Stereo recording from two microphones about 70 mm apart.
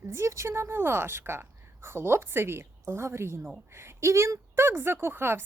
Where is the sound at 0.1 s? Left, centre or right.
Right.